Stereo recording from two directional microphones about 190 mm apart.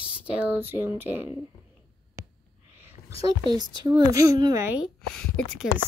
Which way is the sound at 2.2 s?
15° right (ahead or behind).